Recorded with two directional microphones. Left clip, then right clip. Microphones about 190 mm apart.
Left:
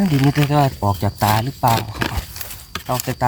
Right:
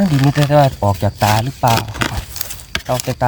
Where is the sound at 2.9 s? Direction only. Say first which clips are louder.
Right 3 dB; 10° right (ahead or behind).